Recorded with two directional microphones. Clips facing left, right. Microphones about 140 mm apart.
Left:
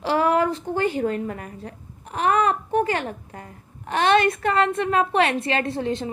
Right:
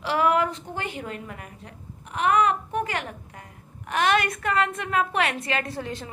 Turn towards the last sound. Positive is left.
turn(degrees=25)  # may be behind; listen again after turning